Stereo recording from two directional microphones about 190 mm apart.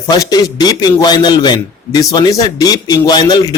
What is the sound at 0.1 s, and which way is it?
A man's voice, 20° left (ahead or behind).